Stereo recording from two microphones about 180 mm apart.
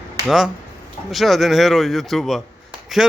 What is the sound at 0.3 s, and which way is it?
Speech, centre (ahead or behind).